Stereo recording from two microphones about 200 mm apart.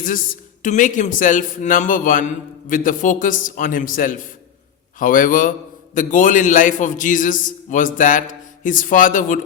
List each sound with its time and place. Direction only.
0.6 s a man's voice: 40° left (ahead or behind)